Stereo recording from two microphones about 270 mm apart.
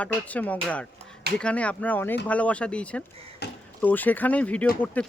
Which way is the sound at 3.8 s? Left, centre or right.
Centre.